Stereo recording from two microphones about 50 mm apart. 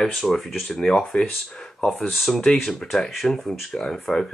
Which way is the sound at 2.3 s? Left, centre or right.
Centre.